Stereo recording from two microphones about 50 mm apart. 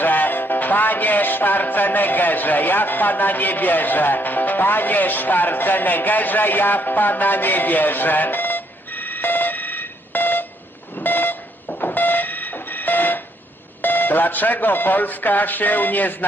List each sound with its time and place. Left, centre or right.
0.0 s music: left
10.9 s a sound: left
11.7 s train: left
13.8 s speech: left